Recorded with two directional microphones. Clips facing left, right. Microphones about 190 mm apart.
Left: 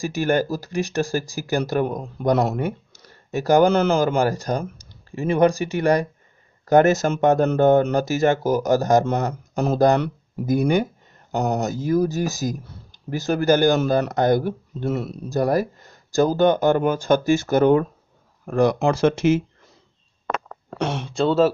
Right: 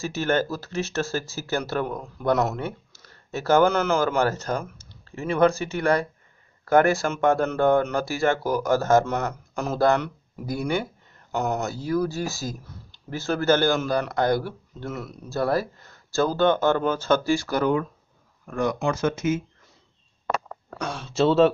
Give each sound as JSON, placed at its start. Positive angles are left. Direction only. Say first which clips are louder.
{"t": 0.0, "sound": "speech", "louder": "left 3 dB", "side_deg": 15}
{"t": 3.7, "sound": "speech", "louder": "left 4 dB", "side_deg": 30}
{"t": 4.2, "sound": "speech", "louder": "left 3 dB", "side_deg": 15}
{"t": 8.4, "sound": "speech", "louder": "left 4 dB", "side_deg": 45}
{"t": 8.6, "sound": "speech", "louder": "left 1 dB", "side_deg": 15}
{"t": 9.0, "sound": "speech", "louder": "left 4 dB", "side_deg": 35}
{"t": 10.4, "sound": "speech", "louder": "left 7 dB", "side_deg": 20}
{"t": 11.3, "sound": "speech", "louder": "left 3 dB", "side_deg": 35}
{"t": 11.6, "sound": "speech", "louder": "left 4 dB", "side_deg": 20}
{"t": 15.2, "sound": "speech", "louder": "left 3 dB", "side_deg": 15}
{"t": 18.5, "sound": "speech", "louder": "left 7 dB", "side_deg": 35}
{"t": 19.0, "sound": "speech", "louder": "left 7 dB", "side_deg": 75}
{"t": 20.7, "sound": "speech", "louder": "left 7 dB", "side_deg": 25}
{"t": 21.1, "sound": "speech", "louder": "right 1 dB", "side_deg": 0}